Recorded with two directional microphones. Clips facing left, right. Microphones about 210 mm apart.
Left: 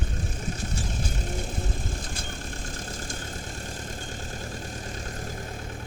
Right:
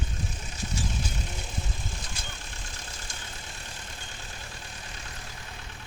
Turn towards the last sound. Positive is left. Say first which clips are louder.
# left 9 dB
turn(degrees=45)  # may be behind; listen again after turning